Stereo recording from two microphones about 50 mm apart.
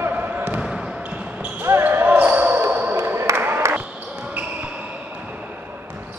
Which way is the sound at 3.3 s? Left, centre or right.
Right.